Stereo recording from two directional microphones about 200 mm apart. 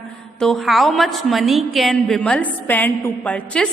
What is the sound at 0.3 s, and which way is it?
A woman's voice, centre (ahead or behind).